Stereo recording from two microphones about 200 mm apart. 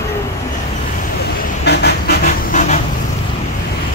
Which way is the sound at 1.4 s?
50° left (ahead or behind).